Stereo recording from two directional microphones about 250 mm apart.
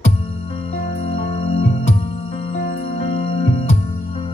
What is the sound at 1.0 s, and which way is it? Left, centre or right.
Music, left.